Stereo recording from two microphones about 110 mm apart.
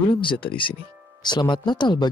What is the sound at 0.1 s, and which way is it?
Speech, 50° left (ahead or behind).